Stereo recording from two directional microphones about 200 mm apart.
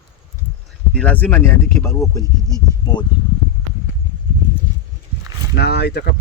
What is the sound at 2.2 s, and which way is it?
Speech, 15° right (ahead or behind).